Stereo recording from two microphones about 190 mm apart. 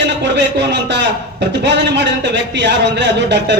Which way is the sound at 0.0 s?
65° right (ahead or behind).